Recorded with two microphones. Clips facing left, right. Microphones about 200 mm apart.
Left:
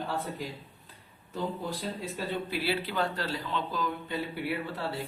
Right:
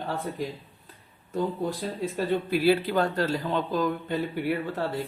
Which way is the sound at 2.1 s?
45° right (ahead or behind).